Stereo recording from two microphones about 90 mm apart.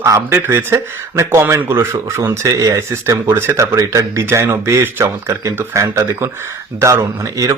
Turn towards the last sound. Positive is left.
turn(degrees=-35)  # may be behind; listen again after turning